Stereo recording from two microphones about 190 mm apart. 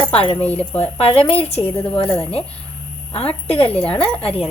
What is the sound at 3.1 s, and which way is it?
Speech, 30° left (ahead or behind).